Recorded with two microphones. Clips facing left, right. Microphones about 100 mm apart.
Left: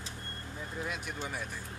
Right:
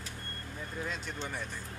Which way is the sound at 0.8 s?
10° left (ahead or behind).